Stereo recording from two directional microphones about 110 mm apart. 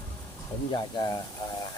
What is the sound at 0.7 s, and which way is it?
Speech, 40° left (ahead or behind).